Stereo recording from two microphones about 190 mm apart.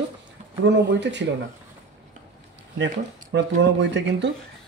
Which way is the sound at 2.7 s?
70° right (ahead or behind).